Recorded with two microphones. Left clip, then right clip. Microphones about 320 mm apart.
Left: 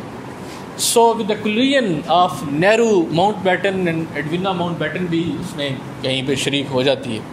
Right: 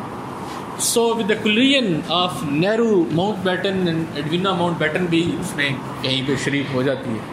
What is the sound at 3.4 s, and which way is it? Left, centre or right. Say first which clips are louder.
Speech: left 4 dB; left.